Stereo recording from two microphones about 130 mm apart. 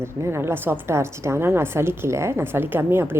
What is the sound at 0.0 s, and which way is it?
A woman's voice, 20° right (ahead or behind).